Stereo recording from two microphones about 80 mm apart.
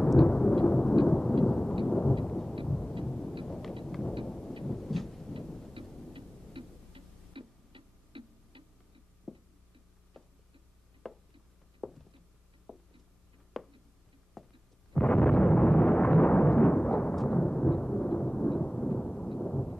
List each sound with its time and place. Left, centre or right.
0.0 s thunder: centre
6.1 s tick-tock: right
9.3 s a sound: centre
14.4 s heart sounds: centre
15.0 s explosion: centre